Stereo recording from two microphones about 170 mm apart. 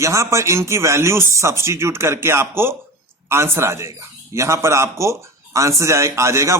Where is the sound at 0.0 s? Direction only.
15° right (ahead or behind).